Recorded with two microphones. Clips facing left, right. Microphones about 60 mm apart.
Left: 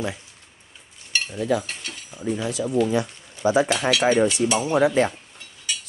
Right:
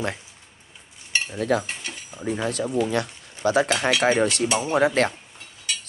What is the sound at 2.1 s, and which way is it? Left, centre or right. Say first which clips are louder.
Speech: even; right.